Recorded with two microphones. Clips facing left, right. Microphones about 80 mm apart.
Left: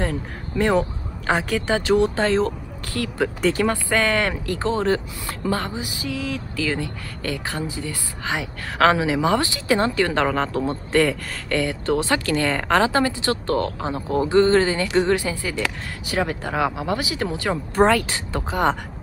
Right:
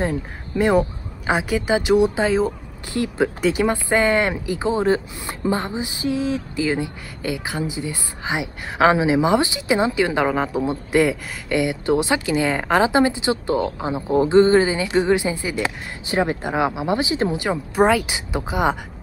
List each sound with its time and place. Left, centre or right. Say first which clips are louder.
0.0 s speech: right 2 dB; centre